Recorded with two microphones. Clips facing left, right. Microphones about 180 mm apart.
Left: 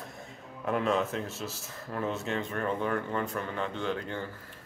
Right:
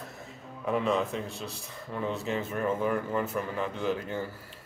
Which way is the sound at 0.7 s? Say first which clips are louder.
Right 1 dB; centre (ahead or behind).